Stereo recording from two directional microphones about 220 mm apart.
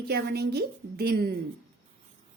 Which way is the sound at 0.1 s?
45° right (ahead or behind).